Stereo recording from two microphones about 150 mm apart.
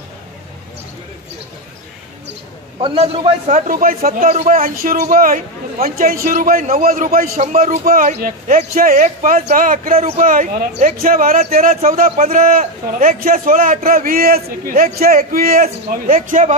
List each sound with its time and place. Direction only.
2.8 s a man's voice: 40° right (ahead or behind)
3.4 s a man's voice: 65° right (ahead or behind)
9.9 s a man's voice: 45° right (ahead or behind)
10.2 s a man's voice: 65° right (ahead or behind)
11.7 s a man's voice: 50° right (ahead or behind); by 15.6 s 75° right (ahead or behind)
15.9 s a man's voice: 65° right (ahead or behind)